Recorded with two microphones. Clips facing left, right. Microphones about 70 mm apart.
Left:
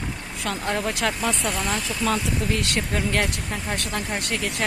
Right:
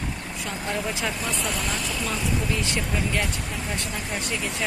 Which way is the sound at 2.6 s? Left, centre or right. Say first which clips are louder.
Left 1 dB; left.